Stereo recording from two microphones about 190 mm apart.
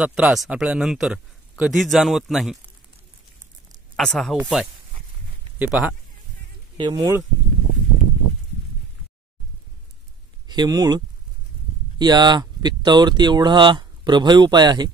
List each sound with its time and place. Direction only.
0.0 s a man's voice: 5° right (ahead or behind)
3.9 s a man's voice: 5° left (ahead or behind)
6.8 s speech: 20° right (ahead or behind)
10.5 s speech: 20° right (ahead or behind)
12.0 s speech: 20° right (ahead or behind)